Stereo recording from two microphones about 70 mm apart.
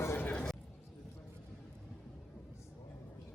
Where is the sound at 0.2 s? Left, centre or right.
Left.